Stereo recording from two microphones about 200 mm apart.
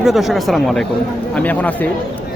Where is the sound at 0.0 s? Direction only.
Centre (ahead or behind).